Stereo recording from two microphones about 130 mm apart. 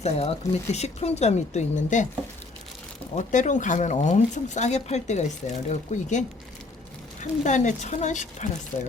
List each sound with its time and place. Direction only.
0.0 s speech: 55° left (ahead or behind)
3.2 s speech: 70° left (ahead or behind)